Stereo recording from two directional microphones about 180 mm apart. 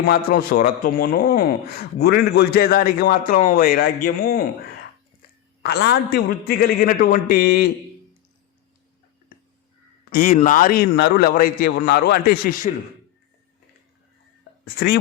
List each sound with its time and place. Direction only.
0.0 s a man's voice: 55° left (ahead or behind)
5.6 s a man's voice: 65° left (ahead or behind)
10.1 s a man's voice: 45° left (ahead or behind); by 11.1 s 65° left (ahead or behind)
11.1 s a man's voice: 50° left (ahead or behind)